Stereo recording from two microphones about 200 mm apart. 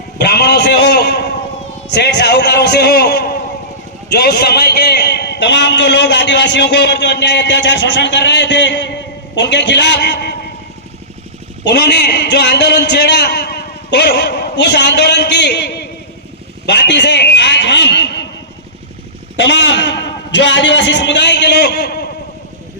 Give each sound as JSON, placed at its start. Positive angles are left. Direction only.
{"t": 0.2, "sound": "a sound", "side_deg": 55}
{"t": 1.9, "sound": "a man's voice", "side_deg": 55}
{"t": 11.6, "sound": "a man's voice", "side_deg": 55}
{"t": 19.4, "sound": "a man's voice", "side_deg": 60}